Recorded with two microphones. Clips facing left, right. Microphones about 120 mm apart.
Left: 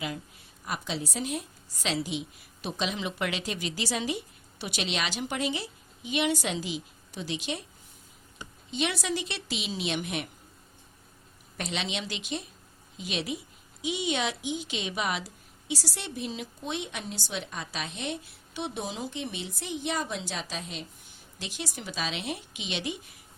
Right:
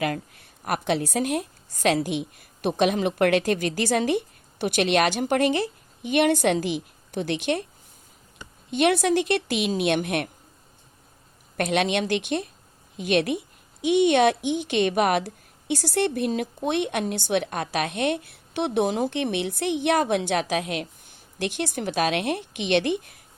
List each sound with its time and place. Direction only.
0.0 s a woman's voice: 60° right (ahead or behind)
8.7 s a woman's voice: 60° right (ahead or behind)
11.5 s a woman's voice: 60° right (ahead or behind)